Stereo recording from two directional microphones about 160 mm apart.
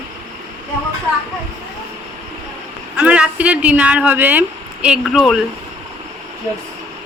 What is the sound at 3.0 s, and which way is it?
Speech, 5° right (ahead or behind).